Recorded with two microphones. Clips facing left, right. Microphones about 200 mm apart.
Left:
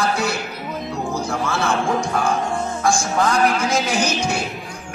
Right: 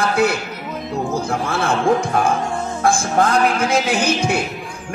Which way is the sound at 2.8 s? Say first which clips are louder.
Right 3 dB; 55° right (ahead or behind).